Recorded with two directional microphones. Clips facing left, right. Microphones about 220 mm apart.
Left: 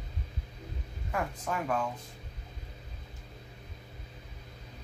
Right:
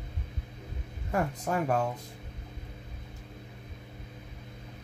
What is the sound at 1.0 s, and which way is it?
Speech, 40° right (ahead or behind).